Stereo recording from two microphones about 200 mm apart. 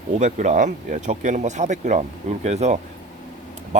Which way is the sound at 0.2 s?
35° right (ahead or behind).